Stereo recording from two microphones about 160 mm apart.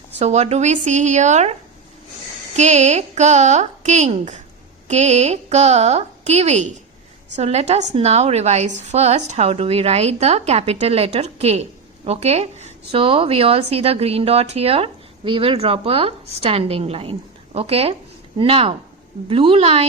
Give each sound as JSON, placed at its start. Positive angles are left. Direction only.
{"t": 0.2, "sound": "a woman's voice", "side_deg": -45}
{"t": 2.6, "sound": "a woman's voice", "side_deg": -45}